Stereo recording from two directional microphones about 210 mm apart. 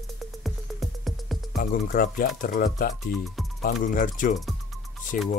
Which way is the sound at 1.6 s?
40° left (ahead or behind).